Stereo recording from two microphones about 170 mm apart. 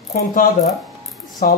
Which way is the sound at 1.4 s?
55° left (ahead or behind).